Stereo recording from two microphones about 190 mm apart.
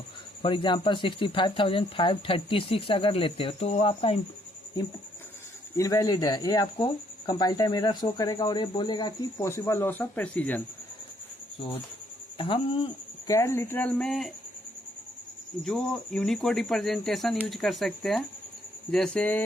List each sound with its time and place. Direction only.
0.4 s speech: 25° left (ahead or behind)
5.7 s speech: 15° left (ahead or behind)
12.4 s speech: 30° left (ahead or behind)
13.3 s speech: 15° left (ahead or behind)
15.6 s speech: 5° left (ahead or behind)